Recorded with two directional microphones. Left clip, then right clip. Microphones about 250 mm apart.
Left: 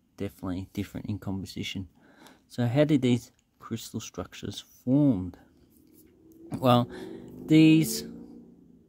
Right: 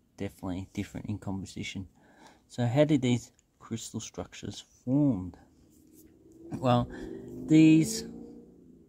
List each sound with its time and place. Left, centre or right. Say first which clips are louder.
0.2 s speech: left 2 dB; centre
6.5 s speech: left 4 dB; centre